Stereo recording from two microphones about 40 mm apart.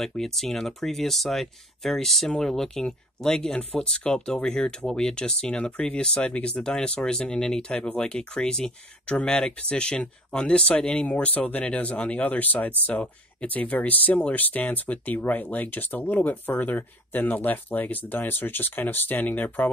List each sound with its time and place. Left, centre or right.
0.2 s speech: centre; by 10.7 s left
11.0 s speech: left